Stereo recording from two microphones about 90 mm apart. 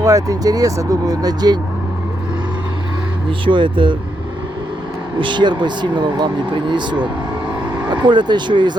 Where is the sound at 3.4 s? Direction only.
65° right (ahead or behind).